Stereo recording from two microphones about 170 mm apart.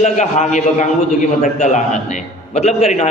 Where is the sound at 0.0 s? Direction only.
45° left (ahead or behind).